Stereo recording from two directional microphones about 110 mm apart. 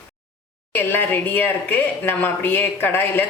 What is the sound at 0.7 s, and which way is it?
Speech, 20° left (ahead or behind).